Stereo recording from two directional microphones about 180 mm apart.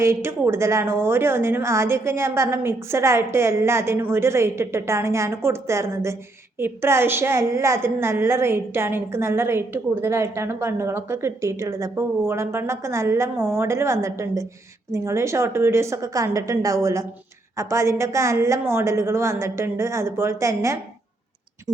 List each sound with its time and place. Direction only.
0.0 s a woman's voice: 15° right (ahead or behind)